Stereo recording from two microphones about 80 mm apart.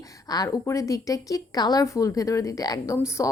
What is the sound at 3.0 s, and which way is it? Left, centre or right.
Speech, left.